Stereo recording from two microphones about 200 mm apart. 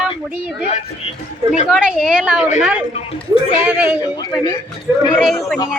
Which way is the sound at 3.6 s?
10° right (ahead or behind).